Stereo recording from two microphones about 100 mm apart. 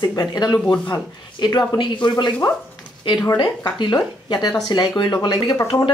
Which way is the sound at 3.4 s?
50° left (ahead or behind).